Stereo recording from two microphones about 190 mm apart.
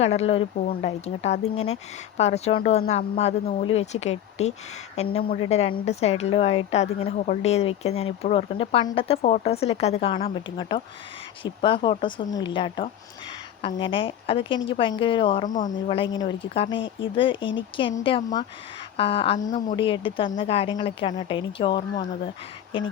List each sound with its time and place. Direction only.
0.0 s a woman's voice: 35° left (ahead or behind)
15.4 s speech: 45° left (ahead or behind)
15.9 s speech: 30° left (ahead or behind)
19.5 s a woman's voice: 40° left (ahead or behind)
19.7 s speech: 25° left (ahead or behind)